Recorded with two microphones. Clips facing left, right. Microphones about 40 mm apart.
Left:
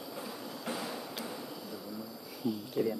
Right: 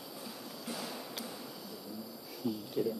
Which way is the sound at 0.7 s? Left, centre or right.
Centre.